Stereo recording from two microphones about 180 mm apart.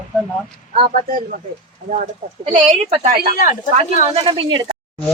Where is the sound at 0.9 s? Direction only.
50° right (ahead or behind).